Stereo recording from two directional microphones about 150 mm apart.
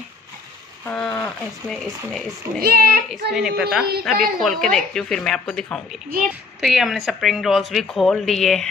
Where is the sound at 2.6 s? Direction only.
90° right.